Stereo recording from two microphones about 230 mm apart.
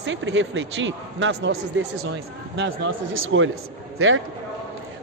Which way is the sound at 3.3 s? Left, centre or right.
Right.